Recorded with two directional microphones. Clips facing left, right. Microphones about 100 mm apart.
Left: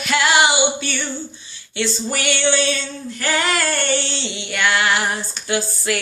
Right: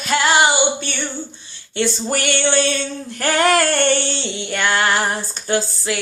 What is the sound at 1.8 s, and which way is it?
Child singing, 50° right (ahead or behind).